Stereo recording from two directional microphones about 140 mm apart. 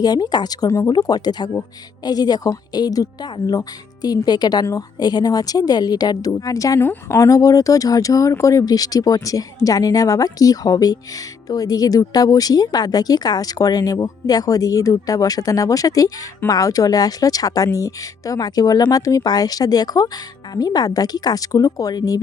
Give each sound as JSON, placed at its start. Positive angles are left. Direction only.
{"t": 0.0, "sound": "a woman's voice", "side_deg": 30}